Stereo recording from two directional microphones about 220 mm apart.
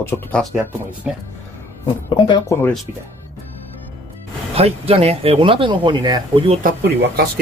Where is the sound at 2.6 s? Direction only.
10° left (ahead or behind).